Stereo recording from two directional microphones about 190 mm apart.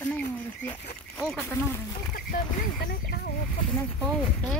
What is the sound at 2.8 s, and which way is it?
Speech, 55° left (ahead or behind).